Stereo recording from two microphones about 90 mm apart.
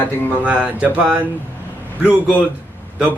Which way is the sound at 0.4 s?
15° right (ahead or behind).